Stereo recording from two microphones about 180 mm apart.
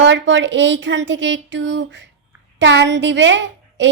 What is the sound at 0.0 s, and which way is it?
A woman's voice, 85° right.